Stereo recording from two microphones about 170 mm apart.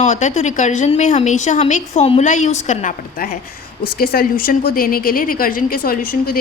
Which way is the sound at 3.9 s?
60° left (ahead or behind).